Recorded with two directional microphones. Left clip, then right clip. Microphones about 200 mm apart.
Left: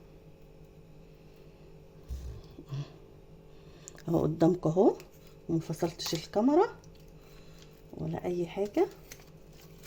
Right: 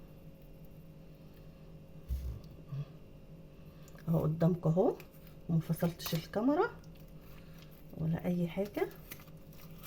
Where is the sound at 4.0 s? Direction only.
45° left (ahead or behind).